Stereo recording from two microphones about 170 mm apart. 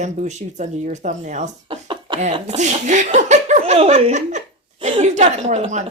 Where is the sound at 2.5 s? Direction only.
45° right (ahead or behind).